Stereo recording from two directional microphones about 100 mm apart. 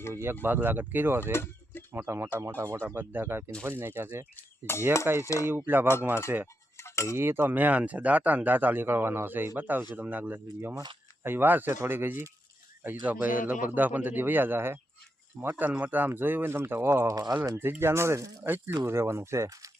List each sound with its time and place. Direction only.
0.1 s speech: 25° right (ahead or behind)
1.2 s a sound: 25° left (ahead or behind)
1.9 s speech: 25° right (ahead or behind)
5.2 s speech: 30° left (ahead or behind)
5.5 s speech: 20° right (ahead or behind)
6.7 s cutlery: 30° left (ahead or behind)
7.2 s speech: 25° right (ahead or behind); by 17.5 s 40° right (ahead or behind)
17.5 s speech: 25° right (ahead or behind)